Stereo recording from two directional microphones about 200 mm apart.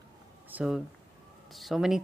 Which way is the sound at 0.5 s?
5° right (ahead or behind).